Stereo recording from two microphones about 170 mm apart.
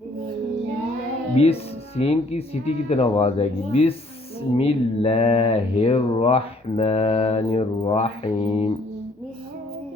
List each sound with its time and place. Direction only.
2.0 s speech: 35° left (ahead or behind)